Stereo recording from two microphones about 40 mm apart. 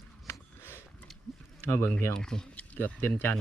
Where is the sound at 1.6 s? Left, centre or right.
Left.